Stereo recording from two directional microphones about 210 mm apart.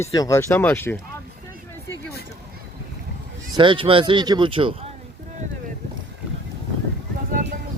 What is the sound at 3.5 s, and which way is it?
Speech, 25° right (ahead or behind).